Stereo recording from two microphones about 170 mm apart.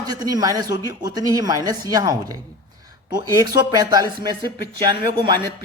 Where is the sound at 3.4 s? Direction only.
25° right (ahead or behind).